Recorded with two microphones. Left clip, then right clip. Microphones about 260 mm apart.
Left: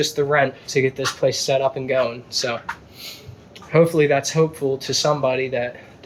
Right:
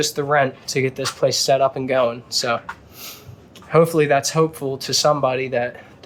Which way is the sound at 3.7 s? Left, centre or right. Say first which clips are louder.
Right 1 dB; centre.